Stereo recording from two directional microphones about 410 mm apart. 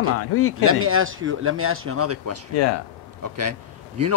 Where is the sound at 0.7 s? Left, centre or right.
Right.